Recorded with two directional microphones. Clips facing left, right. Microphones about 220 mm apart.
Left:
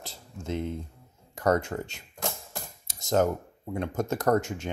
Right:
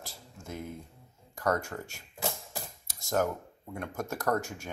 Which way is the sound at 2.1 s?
5° right (ahead or behind).